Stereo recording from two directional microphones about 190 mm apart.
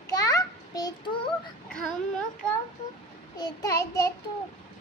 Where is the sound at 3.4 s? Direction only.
15° left (ahead or behind).